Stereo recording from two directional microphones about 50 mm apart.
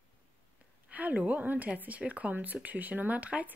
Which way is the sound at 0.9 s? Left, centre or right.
Right.